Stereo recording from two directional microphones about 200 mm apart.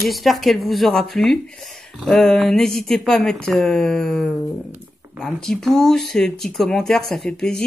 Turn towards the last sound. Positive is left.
turn(degrees=5)  # may be behind; listen again after turning